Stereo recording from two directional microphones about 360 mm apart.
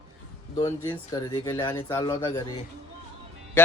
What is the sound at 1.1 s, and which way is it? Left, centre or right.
Speech, centre.